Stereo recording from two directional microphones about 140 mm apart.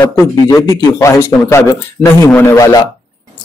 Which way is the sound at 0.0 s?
20° left (ahead or behind).